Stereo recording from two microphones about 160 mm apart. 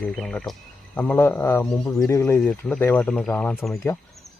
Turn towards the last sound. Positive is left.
turn(degrees=5)  # may be behind; listen again after turning